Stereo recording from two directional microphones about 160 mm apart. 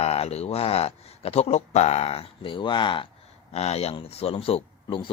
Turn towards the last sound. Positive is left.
turn(degrees=35)  # may be behind; listen again after turning